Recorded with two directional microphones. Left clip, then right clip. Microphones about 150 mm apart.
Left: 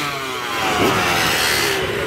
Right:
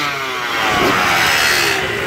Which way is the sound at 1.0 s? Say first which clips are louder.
Right 4 dB; 30° right (ahead or behind).